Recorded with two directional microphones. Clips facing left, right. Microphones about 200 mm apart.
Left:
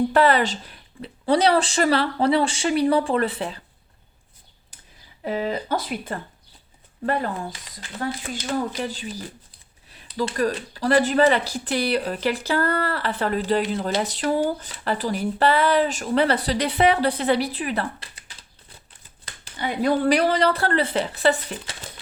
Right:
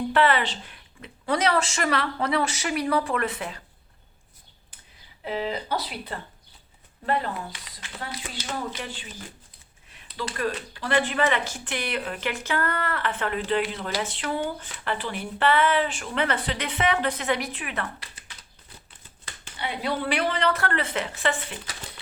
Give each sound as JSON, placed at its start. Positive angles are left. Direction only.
{"t": 0.1, "sound": "speech", "side_deg": 40}
{"t": 5.2, "sound": "speech", "side_deg": 45}
{"t": 8.3, "sound": "speech", "side_deg": 40}
{"t": 19.5, "sound": "speech", "side_deg": 45}